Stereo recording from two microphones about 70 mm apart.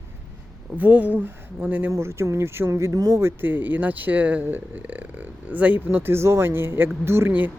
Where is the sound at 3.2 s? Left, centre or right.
Right.